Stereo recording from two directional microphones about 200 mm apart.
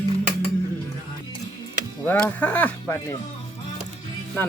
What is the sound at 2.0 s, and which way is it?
Speech, 5° left (ahead or behind).